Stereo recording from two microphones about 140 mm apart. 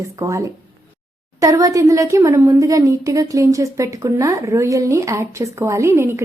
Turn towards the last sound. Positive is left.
turn(degrees=-20)  # may be behind; listen again after turning